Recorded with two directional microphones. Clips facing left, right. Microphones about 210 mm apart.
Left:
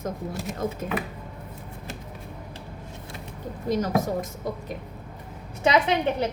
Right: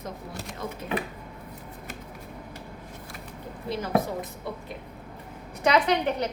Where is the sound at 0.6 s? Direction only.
45° left (ahead or behind).